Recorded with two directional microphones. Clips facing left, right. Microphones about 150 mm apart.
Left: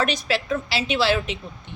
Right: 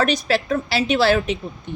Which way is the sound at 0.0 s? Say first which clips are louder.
Right 4 dB; 40° right (ahead or behind).